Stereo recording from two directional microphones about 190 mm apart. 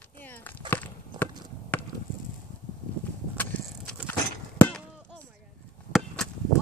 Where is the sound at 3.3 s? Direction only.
10° left (ahead or behind).